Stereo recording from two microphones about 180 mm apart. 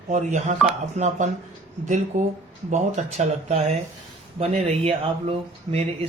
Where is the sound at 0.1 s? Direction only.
40° right (ahead or behind).